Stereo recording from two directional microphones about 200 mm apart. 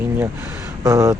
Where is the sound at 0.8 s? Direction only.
15° right (ahead or behind).